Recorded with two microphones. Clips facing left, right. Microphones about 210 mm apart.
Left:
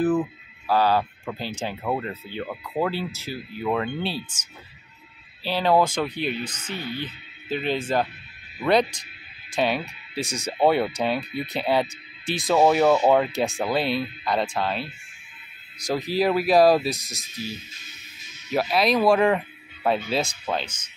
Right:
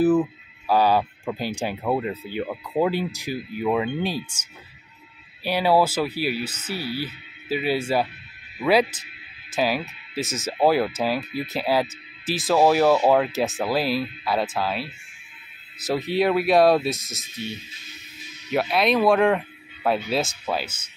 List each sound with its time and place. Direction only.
0.0 s speech: 5° right (ahead or behind)
5.4 s speech: 10° right (ahead or behind)